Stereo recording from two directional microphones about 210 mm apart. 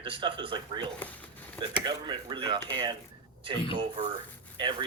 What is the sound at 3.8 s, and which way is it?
Speech, 25° right (ahead or behind).